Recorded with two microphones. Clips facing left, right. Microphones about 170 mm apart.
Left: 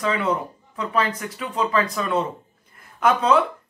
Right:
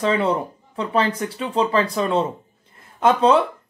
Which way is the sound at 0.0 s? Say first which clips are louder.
Right 3 dB; 30° right (ahead or behind).